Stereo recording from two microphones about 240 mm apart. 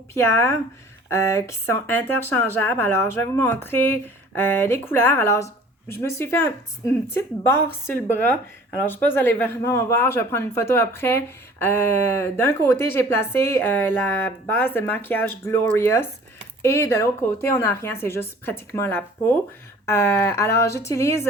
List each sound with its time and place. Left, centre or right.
0.1 s a woman's voice: centre
8.8 s a woman's voice: centre